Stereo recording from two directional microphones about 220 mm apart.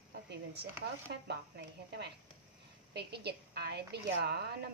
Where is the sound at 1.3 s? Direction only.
50° right (ahead or behind).